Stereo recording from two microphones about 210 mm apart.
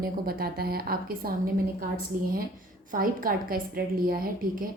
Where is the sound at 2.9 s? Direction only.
45° right (ahead or behind).